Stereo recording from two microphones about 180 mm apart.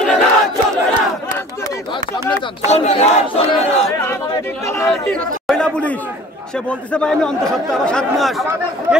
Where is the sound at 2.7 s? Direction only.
35° left (ahead or behind).